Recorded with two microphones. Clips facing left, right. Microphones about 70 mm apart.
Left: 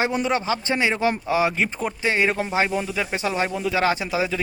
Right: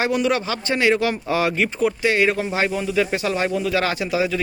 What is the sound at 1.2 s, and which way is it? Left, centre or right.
Speech, centre.